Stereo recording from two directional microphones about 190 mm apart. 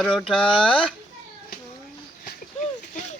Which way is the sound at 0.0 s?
5° left (ahead or behind).